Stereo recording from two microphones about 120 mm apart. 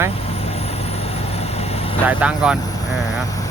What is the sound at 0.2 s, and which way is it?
Vehicle, 55° left (ahead or behind).